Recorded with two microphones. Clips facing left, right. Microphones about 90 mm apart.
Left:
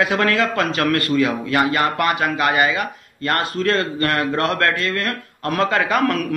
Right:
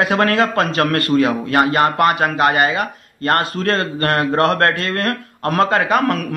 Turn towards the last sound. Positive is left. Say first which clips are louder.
# right 2 dB
turn(degrees=-30)  # may be behind; listen again after turning